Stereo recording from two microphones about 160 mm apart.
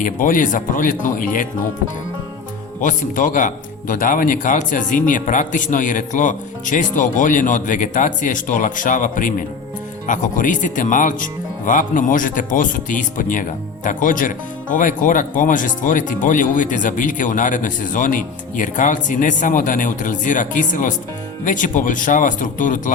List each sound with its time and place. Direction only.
0.0 s speech: 55° left (ahead or behind)
2.8 s speech: 55° left (ahead or behind)